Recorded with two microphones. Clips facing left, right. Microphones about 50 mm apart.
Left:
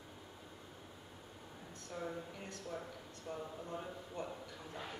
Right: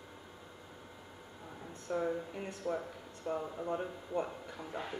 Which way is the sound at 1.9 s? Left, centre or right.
Right.